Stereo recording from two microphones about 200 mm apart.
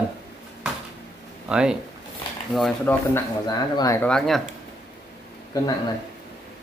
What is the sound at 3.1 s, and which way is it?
Speech, 15° left (ahead or behind).